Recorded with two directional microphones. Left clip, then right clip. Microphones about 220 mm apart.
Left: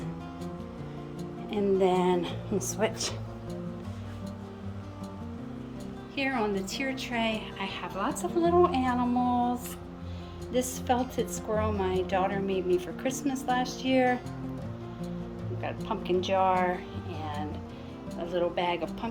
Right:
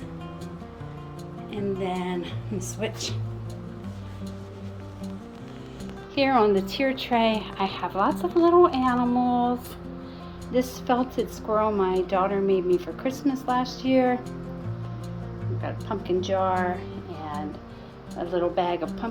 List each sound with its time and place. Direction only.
1.5 s music: 25° left (ahead or behind)
6.1 s a woman's voice: centre (ahead or behind)
15.6 s speech: 10° left (ahead or behind)
18.2 s a woman's voice: centre (ahead or behind)